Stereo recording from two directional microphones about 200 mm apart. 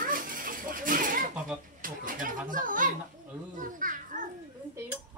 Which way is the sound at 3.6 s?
40° right (ahead or behind).